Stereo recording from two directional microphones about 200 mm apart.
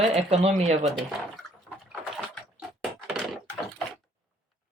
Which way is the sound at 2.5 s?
Centre (ahead or behind).